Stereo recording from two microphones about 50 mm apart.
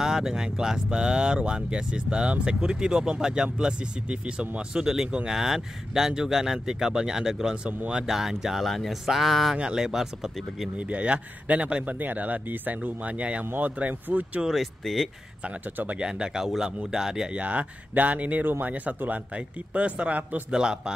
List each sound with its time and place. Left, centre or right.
0.0 s speech: centre
9.6 s speech: centre
10.8 s speech: right
14.5 s speech: centre
16.0 s speech: centre
17.4 s speech: right
20.5 s speech: centre